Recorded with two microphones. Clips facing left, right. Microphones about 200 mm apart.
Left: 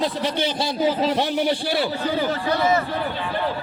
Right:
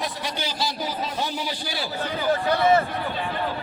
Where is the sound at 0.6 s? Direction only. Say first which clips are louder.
Left 10 dB; 80° left; by 1.8 s 60° left (ahead or behind).